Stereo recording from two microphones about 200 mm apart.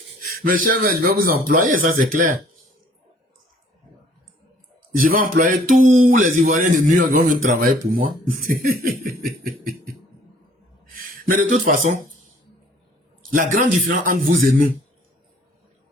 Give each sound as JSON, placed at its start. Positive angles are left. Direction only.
{"t": 0.2, "sound": "a man's voice", "side_deg": -45}
{"t": 4.9, "sound": "a man's voice", "side_deg": -45}
{"t": 10.9, "sound": "speech", "side_deg": -45}
{"t": 13.3, "sound": "a man's voice", "side_deg": -45}